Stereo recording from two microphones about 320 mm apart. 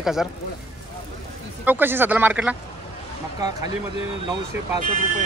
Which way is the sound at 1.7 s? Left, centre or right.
Centre.